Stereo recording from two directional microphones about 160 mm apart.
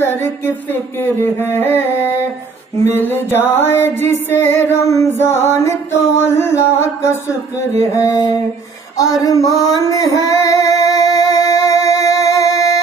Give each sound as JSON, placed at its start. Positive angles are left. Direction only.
{"t": 1.0, "sound": "music", "side_deg": 15}
{"t": 7.8, "sound": "a sound", "side_deg": 20}
{"t": 9.6, "sound": "music", "side_deg": 20}